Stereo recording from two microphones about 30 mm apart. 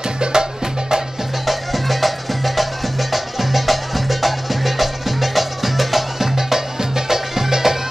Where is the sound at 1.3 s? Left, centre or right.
Centre.